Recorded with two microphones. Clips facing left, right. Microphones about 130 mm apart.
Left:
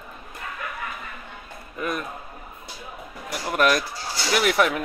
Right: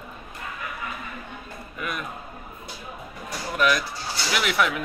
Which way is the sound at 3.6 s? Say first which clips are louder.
Left 2 dB; 50° left (ahead or behind).